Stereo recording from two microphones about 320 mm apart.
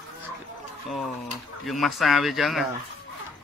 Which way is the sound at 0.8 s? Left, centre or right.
Centre.